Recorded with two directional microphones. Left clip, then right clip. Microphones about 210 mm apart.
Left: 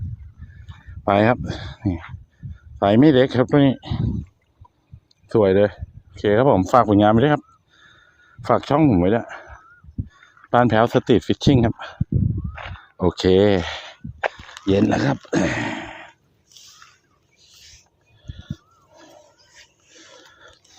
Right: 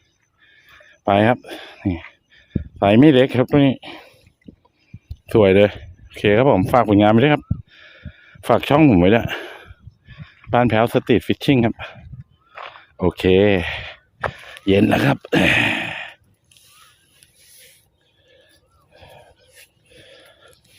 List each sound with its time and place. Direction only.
1.1 s speech: 5° right (ahead or behind)
5.2 s speech: 15° right (ahead or behind)
10.5 s speech: 10° right (ahead or behind)
13.0 s speech: 10° right (ahead or behind)